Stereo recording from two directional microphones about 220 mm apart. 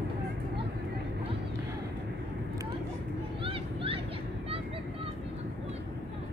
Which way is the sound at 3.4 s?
25° right (ahead or behind).